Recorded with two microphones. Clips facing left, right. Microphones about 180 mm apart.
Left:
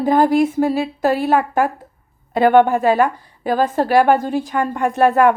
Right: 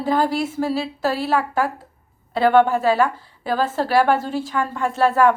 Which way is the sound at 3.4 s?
45° left (ahead or behind).